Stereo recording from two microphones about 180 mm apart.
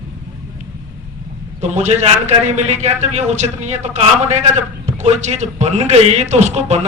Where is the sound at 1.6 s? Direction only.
40° right (ahead or behind).